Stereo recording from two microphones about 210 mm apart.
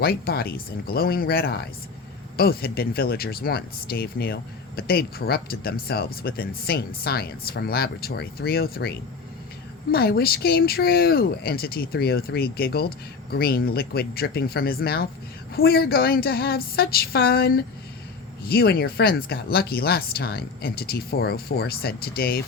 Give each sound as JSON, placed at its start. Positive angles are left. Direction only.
{"t": 0.0, "sound": "speech", "side_deg": 45}